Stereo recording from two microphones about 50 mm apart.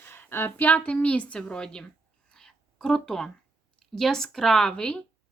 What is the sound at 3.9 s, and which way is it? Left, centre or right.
A woman's voice, centre.